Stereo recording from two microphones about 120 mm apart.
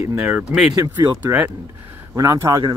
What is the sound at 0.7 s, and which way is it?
Speech, 30° right (ahead or behind).